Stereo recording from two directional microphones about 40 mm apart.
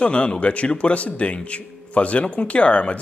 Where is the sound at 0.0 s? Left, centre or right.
Left.